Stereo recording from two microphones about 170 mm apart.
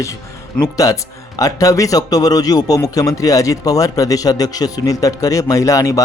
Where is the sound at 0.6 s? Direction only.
20° left (ahead or behind).